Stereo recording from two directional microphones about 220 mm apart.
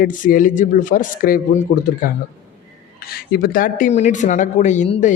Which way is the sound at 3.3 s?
40° left (ahead or behind).